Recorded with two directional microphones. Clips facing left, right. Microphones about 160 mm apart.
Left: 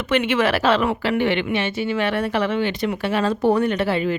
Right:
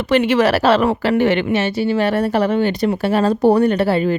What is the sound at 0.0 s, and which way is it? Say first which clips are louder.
Speech: right 5 dB; 35° right (ahead or behind).